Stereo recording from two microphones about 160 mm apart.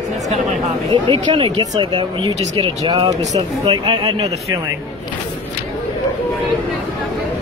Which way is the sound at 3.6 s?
30° right (ahead or behind).